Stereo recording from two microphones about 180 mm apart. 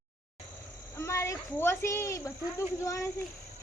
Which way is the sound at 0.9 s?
15° left (ahead or behind).